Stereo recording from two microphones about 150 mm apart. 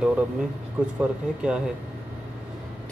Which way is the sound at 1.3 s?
5° right (ahead or behind).